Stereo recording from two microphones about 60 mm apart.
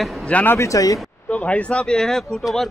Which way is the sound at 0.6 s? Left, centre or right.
Left.